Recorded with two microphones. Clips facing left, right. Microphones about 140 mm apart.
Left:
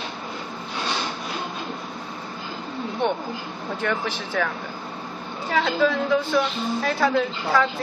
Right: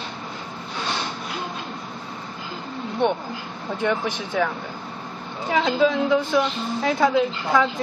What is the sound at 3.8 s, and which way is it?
Speech, 15° right (ahead or behind).